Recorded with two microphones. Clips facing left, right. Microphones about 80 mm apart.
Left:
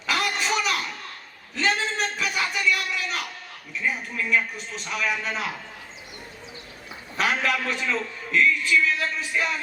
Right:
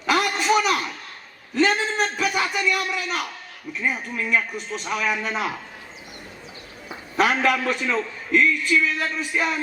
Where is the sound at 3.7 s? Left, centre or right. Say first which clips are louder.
Right 2 dB; right.